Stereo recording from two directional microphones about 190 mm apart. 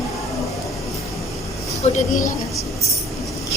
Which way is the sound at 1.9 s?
45° left (ahead or behind).